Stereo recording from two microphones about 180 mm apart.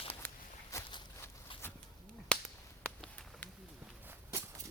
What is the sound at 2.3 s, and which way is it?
Finger snapping, 5° left (ahead or behind).